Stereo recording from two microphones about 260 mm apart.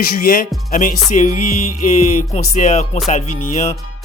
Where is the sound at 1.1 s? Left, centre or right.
Left.